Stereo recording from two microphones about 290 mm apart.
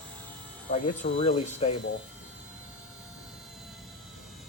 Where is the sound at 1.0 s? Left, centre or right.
Left.